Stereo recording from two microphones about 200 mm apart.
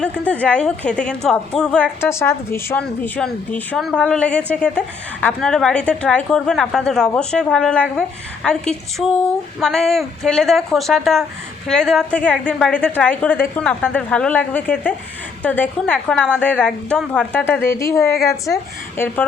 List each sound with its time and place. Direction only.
0.0 s a woman's voice: 5° left (ahead or behind)
18.1 s a woman's voice: 50° left (ahead or behind)
18.9 s speech: 10° left (ahead or behind)